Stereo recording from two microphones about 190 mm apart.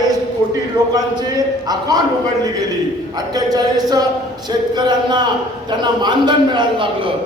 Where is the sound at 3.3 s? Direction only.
20° right (ahead or behind).